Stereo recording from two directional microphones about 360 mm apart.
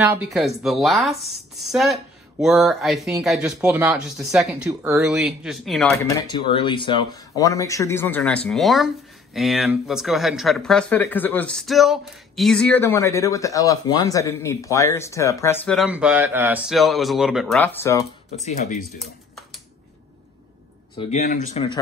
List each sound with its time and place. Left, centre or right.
0.0 s speech: centre
6.2 s speech: centre
20.9 s speech: centre